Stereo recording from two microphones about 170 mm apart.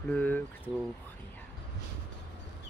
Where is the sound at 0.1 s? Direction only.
10° left (ahead or behind).